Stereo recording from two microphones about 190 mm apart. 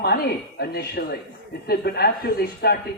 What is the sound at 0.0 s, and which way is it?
A man's voice, 55° left (ahead or behind).